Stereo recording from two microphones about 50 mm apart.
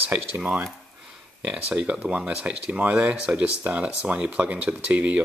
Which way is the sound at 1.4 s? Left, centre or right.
Right.